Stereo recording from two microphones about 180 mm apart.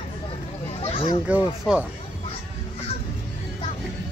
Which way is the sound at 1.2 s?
5° right (ahead or behind).